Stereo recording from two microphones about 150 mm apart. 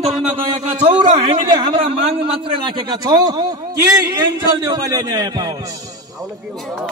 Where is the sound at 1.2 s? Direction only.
40° right (ahead or behind).